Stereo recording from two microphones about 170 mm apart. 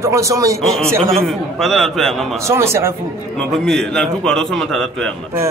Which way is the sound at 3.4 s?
5° left (ahead or behind).